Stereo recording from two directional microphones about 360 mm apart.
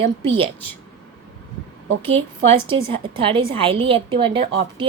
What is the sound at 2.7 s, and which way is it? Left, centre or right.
A woman's voice, centre.